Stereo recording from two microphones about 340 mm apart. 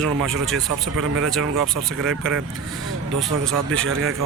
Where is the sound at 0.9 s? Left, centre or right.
Right.